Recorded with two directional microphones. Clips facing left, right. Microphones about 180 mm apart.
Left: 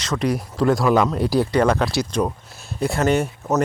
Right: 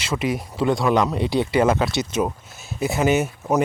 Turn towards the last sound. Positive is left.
turn(degrees=-5)  # may be behind; listen again after turning